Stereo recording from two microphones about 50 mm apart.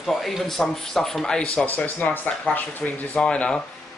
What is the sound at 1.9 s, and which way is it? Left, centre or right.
Speech, left.